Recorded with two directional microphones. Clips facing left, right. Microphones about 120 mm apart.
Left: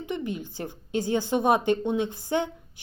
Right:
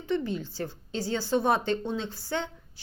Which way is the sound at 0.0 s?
15° left (ahead or behind).